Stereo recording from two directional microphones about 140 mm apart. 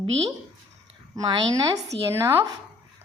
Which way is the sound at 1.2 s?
25° right (ahead or behind).